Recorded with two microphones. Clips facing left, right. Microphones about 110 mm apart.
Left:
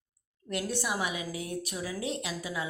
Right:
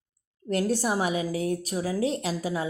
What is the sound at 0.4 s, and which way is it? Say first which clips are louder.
A woman's voice: right 7 dB; 40° right (ahead or behind).